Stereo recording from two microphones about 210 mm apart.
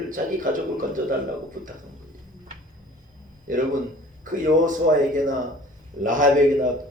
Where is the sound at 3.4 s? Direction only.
40° right (ahead or behind).